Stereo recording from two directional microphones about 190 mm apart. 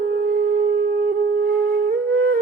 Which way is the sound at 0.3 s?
50° right (ahead or behind).